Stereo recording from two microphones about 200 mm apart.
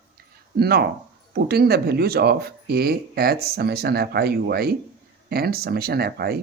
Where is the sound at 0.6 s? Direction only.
50° right (ahead or behind).